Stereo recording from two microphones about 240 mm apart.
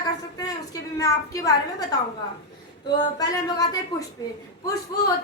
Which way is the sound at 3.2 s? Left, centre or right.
Centre.